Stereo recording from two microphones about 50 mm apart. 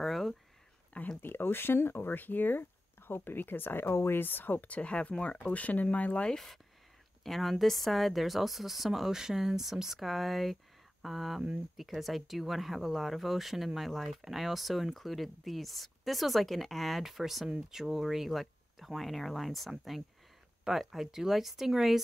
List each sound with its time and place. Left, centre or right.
0.0 s a sound: centre
1.2 s speech: left
3.9 s speech: left
4.2 s speech: left
6.2 s a woman's voice: centre
20.8 s a woman's voice: centre